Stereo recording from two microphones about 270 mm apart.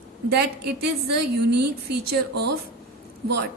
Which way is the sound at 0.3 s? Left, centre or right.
Right.